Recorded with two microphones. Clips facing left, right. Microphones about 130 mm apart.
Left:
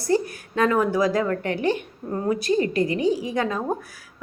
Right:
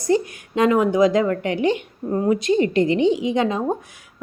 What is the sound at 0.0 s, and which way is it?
A woman's voice, 20° right (ahead or behind).